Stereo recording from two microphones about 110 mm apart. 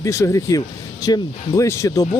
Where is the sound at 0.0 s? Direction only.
30° left (ahead or behind).